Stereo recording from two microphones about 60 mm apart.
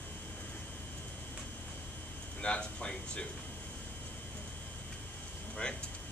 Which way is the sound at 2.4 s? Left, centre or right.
Centre.